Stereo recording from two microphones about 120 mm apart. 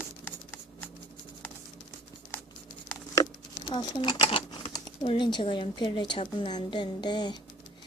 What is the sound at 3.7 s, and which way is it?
Speech, 40° left (ahead or behind).